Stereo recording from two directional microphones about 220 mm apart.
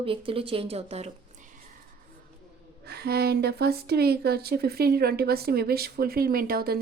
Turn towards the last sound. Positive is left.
turn(degrees=-40)  # may be behind; listen again after turning